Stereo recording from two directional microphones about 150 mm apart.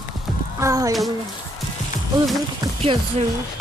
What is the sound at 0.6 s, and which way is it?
Speech, 20° right (ahead or behind).